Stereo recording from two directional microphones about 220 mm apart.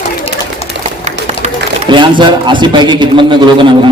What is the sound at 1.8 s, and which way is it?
A man's voice, 20° right (ahead or behind).